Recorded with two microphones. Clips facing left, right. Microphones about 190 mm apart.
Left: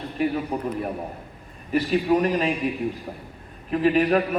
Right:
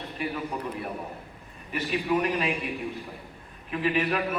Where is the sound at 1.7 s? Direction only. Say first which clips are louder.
Left 6 dB; 35° left (ahead or behind).